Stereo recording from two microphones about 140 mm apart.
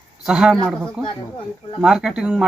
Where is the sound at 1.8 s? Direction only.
5° right (ahead or behind).